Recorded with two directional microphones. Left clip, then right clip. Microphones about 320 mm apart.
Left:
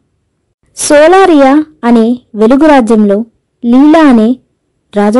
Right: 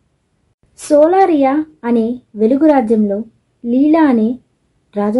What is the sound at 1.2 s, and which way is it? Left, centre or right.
A woman's voice, left.